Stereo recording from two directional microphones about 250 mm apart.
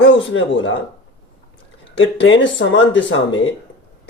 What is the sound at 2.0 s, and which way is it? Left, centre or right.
Speech, left.